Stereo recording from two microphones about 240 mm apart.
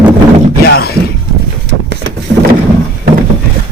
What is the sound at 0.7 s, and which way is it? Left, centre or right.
Speech, left.